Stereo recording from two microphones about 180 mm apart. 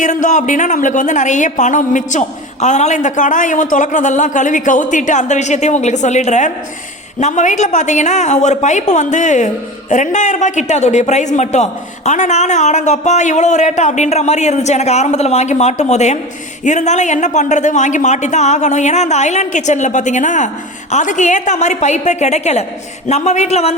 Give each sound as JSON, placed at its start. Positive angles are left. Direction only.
{"t": 0.0, "sound": "a man's voice", "side_deg": 45}